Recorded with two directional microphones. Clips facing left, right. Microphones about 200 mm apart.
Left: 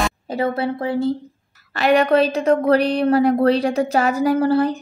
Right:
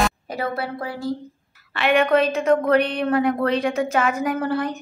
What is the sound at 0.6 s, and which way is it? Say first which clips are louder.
Speech: left 8 dB; 25° left (ahead or behind).